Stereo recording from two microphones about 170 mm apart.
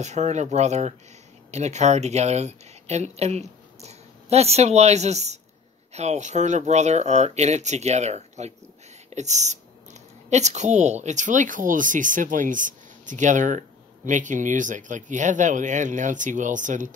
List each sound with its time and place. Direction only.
0.0 s speech: 40° right (ahead or behind)